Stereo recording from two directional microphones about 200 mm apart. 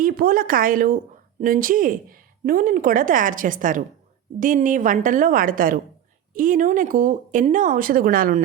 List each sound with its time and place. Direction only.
0.0 s a woman's voice: 45° right (ahead or behind)